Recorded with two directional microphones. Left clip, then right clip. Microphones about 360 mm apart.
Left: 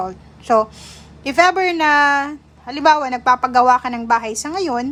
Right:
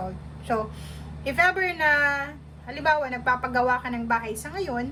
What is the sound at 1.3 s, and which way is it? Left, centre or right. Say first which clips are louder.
A woman's voice: left 8 dB; centre.